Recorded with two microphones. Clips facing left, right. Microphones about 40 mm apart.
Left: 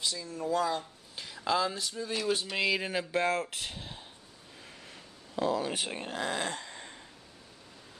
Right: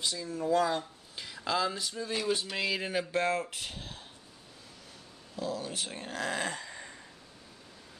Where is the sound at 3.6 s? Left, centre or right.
Centre.